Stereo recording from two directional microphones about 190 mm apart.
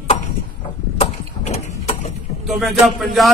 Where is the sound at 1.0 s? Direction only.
35° left (ahead or behind).